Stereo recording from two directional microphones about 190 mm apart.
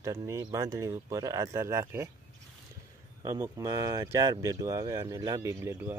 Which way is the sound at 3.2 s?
15° right (ahead or behind).